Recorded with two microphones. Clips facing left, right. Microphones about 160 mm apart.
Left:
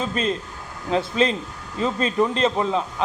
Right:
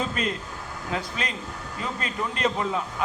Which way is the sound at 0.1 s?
25° left (ahead or behind).